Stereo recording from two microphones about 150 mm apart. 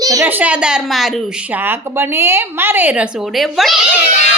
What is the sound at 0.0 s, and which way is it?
Speech, 25° right (ahead or behind).